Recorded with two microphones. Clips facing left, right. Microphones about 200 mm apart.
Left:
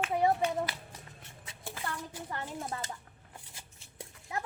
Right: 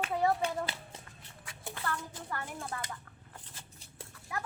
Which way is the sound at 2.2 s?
20° left (ahead or behind).